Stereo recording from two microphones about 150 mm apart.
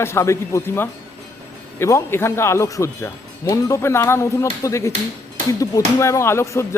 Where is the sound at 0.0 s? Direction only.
20° left (ahead or behind).